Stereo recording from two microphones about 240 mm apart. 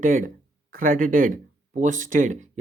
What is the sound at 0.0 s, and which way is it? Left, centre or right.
Speech, right.